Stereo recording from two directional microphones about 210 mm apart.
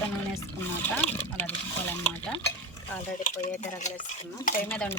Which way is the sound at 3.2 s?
40° left (ahead or behind).